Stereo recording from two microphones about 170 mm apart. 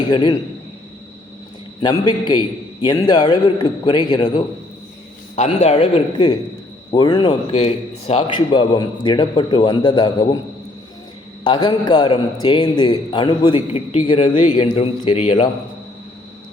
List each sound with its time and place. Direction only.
0.1 s a man's voice: 25° left (ahead or behind)
1.8 s a man's voice: 25° left (ahead or behind)
5.4 s a man's voice: 40° left (ahead or behind)
11.4 s a man's voice: 25° left (ahead or behind)